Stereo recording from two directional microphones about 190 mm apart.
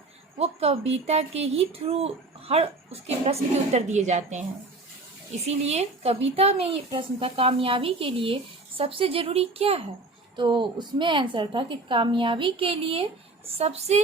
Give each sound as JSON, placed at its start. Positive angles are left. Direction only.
{"t": 0.3, "sound": "speech", "side_deg": -35}
{"t": 5.5, "sound": "a woman's voice", "side_deg": -35}